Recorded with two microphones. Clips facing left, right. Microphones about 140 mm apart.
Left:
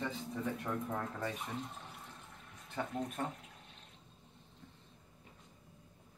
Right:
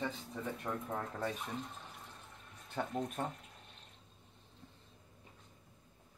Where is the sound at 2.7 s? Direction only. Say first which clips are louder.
Right 1 dB; 10° right (ahead or behind).